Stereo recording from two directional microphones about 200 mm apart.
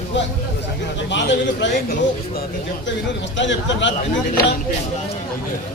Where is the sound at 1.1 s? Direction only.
65° left (ahead or behind).